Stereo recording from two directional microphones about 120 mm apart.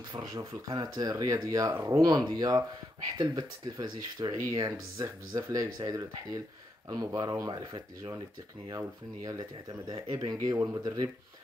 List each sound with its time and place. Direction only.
0.1 s speech: 35° right (ahead or behind)